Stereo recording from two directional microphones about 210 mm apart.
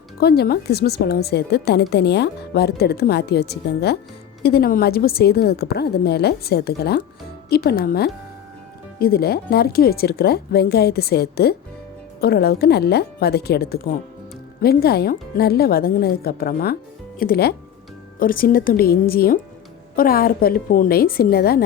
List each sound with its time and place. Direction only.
0.2 s a woman's voice: 50° left (ahead or behind)